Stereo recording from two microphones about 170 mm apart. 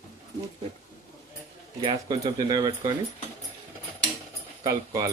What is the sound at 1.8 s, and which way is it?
Speech, 25° right (ahead or behind).